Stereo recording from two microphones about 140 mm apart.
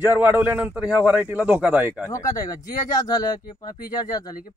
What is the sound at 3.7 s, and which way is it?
Speech, 90° left.